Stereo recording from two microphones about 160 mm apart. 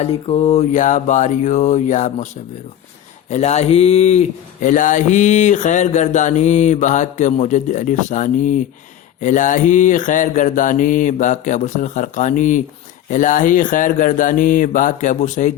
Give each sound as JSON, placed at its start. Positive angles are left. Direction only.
{"t": 0.0, "sound": "speech", "side_deg": 40}
{"t": 3.2, "sound": "speech", "side_deg": 45}